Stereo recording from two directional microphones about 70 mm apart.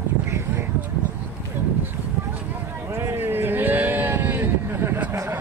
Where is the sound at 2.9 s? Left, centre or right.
Right.